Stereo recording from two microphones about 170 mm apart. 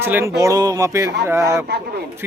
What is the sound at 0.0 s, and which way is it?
A man's voice, 15° right (ahead or behind).